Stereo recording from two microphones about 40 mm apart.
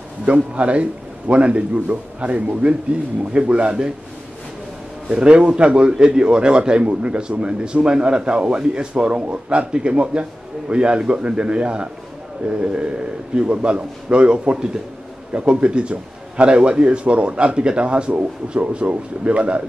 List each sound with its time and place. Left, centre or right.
0.2 s a man's voice: right
5.1 s a man's voice: right